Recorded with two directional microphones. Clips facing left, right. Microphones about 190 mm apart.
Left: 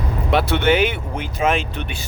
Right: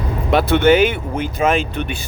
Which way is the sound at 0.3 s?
45° right (ahead or behind).